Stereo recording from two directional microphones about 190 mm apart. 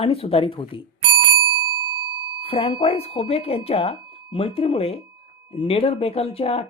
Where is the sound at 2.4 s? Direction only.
30° left (ahead or behind).